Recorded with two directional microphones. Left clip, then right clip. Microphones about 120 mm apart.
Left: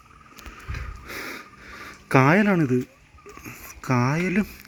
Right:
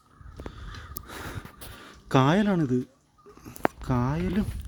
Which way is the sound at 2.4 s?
Centre (ahead or behind).